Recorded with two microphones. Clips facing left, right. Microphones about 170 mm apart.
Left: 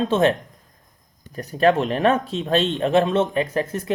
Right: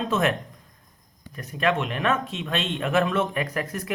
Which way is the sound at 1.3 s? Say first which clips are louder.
Left 7 dB; 35° left (ahead or behind).